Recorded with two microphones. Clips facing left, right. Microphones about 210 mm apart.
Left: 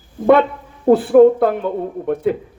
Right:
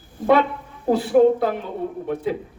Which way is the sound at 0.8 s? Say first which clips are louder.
Left 6 dB; 55° left (ahead or behind).